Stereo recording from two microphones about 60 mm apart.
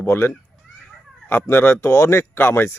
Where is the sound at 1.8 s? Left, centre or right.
Left.